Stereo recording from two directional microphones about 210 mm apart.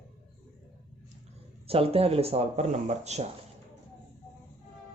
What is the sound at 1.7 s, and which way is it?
Speech, 30° right (ahead or behind).